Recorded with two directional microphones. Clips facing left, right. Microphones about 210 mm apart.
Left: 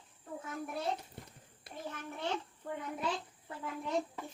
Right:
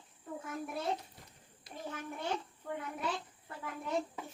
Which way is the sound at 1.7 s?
60° left (ahead or behind).